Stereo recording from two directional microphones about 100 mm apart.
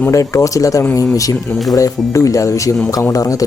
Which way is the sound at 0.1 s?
30° left (ahead or behind).